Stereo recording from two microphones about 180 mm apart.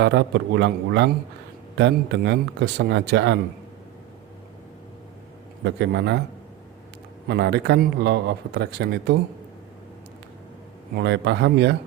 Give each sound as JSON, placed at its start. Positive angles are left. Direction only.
{"t": 0.0, "sound": "speech", "side_deg": -75}
{"t": 5.6, "sound": "speech", "side_deg": -70}
{"t": 7.3, "sound": "speech", "side_deg": -70}
{"t": 10.9, "sound": "speech", "side_deg": -70}